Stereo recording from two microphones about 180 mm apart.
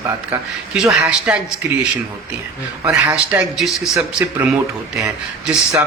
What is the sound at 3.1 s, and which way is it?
Speech, 5° right (ahead or behind).